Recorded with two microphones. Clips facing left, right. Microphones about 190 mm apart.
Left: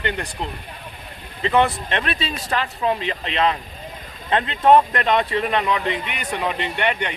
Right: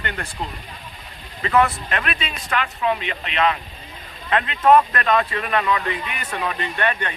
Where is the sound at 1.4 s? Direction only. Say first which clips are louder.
Even; 25° left (ahead or behind).